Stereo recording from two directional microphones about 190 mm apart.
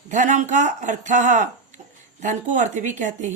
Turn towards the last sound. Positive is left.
turn(degrees=-40)  # may be behind; listen again after turning